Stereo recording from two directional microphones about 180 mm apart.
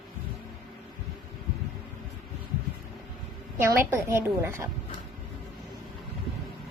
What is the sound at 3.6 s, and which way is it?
Speech, 15° right (ahead or behind).